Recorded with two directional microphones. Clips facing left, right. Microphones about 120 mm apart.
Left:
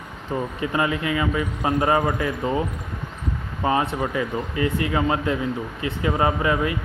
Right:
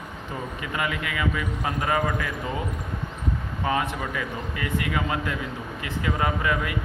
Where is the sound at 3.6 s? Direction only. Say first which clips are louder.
Left 5 dB; 30° left (ahead or behind).